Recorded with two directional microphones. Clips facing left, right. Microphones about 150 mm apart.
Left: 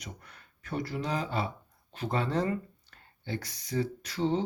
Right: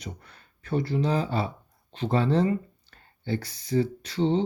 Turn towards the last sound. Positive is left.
turn(degrees=-25)  # may be behind; listen again after turning